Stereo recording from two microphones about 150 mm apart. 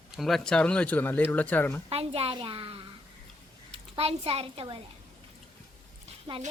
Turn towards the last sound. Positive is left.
turn(degrees=-20)  # may be behind; listen again after turning